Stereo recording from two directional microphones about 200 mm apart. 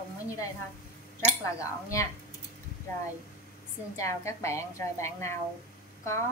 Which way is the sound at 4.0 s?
15° left (ahead or behind).